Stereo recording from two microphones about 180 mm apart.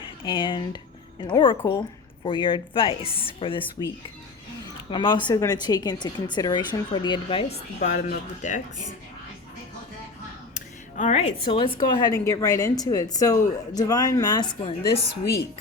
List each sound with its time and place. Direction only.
0.3 s speech: 25° left (ahead or behind)
4.9 s speech: 25° left (ahead or behind); by 8.6 s 45° left (ahead or behind)
10.5 s a sound: 45° left (ahead or behind)
11.4 s speech: 25° left (ahead or behind)